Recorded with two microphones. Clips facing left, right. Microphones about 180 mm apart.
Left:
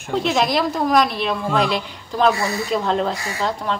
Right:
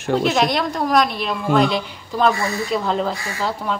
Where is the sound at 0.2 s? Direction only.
Centre (ahead or behind).